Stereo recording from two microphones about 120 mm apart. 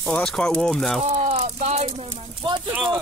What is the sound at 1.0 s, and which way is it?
Speech, 65° right (ahead or behind).